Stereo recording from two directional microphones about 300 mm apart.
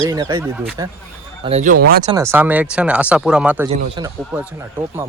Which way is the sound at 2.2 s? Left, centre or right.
Centre.